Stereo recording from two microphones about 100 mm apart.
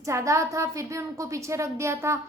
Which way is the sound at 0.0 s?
30° right (ahead or behind).